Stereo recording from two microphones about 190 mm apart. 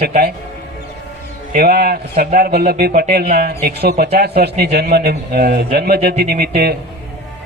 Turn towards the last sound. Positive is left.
turn(degrees=-55)  # may be behind; listen again after turning